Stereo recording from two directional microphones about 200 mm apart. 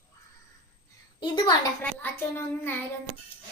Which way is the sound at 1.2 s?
20° left (ahead or behind).